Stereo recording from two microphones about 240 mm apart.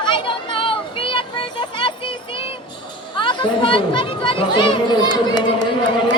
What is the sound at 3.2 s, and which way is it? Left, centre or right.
Speech, centre.